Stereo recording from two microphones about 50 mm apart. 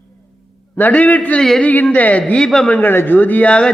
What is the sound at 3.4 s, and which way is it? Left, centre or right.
Speech, left.